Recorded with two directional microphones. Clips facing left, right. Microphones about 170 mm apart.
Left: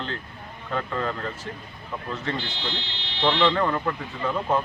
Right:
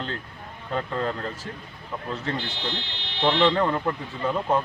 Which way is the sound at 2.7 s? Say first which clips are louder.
Right 1 dB; 55° right (ahead or behind).